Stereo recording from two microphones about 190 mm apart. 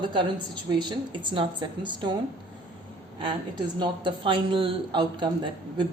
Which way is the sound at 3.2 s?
25° right (ahead or behind).